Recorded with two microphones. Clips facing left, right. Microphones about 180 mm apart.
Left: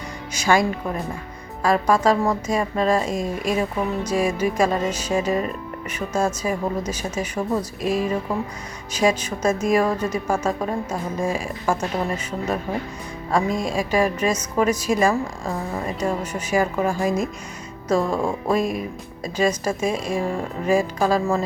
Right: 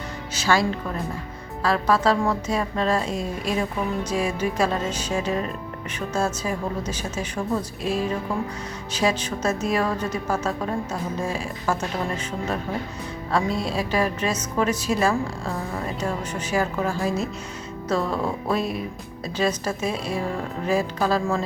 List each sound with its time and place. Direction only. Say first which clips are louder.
0.3 s a woman's voice: left 2 dB; 15° left (ahead or behind)
13.5 s speech: left 2 dB; 45° left (ahead or behind)
13.7 s a woman's voice: left 5 dB; 10° left (ahead or behind)